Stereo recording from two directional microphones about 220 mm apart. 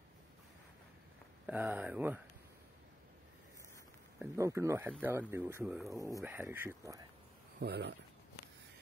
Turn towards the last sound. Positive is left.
turn(degrees=-45)  # may be behind; listen again after turning